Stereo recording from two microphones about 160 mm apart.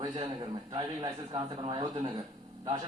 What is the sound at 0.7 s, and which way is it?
A man's voice, 35° right (ahead or behind).